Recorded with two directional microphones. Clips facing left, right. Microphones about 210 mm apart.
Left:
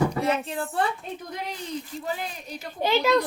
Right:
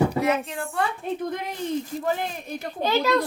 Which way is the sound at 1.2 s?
55° right (ahead or behind).